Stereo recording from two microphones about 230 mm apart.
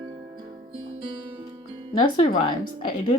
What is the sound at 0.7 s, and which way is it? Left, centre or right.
Guitar, right.